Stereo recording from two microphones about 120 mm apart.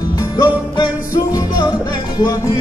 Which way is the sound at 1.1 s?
30° left (ahead or behind).